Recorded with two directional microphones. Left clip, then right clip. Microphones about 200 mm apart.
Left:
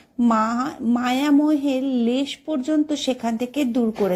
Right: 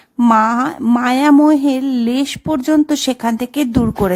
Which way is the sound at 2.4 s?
35° right (ahead or behind).